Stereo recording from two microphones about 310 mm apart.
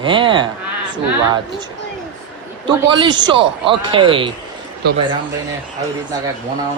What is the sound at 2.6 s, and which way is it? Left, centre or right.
A man's voice, centre.